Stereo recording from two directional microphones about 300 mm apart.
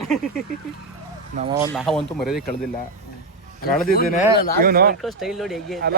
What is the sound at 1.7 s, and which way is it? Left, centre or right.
Speech, centre.